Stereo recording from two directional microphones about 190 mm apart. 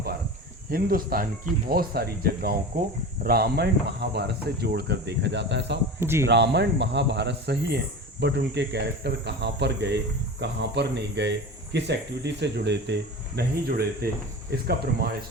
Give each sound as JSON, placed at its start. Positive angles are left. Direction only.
{"t": 0.7, "sound": "speech", "side_deg": -50}
{"t": 6.0, "sound": "speech", "side_deg": -15}
{"t": 6.2, "sound": "speech", "side_deg": -65}